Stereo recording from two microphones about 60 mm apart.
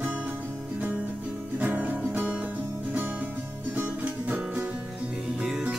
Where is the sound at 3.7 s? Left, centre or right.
Right.